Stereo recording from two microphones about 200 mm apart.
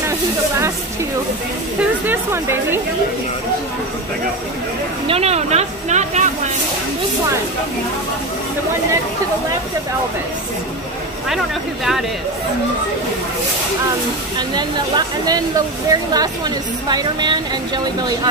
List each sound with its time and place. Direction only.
1.8 s speech: 10° right (ahead or behind)
5.0 s speech: 30° right (ahead or behind)
11.2 s speech: centre (ahead or behind)
14.5 s speech: 20° right (ahead or behind)